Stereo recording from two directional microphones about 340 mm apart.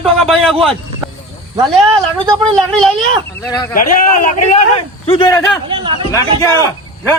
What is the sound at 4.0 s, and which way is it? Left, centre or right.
A man's voice, left.